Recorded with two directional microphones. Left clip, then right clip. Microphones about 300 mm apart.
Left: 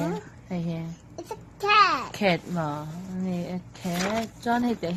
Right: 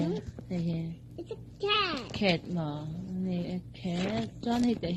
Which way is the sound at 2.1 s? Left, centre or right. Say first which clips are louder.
Left 5 dB; centre.